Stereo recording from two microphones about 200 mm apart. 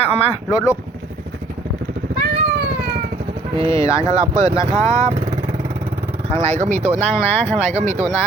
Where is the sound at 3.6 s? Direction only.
25° right (ahead or behind).